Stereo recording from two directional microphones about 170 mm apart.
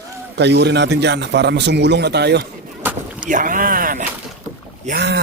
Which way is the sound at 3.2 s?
50° right (ahead or behind).